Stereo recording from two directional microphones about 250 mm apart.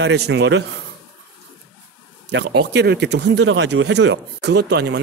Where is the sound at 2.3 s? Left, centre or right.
Right.